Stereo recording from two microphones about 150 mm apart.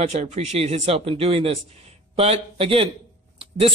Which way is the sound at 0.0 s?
50° right (ahead or behind).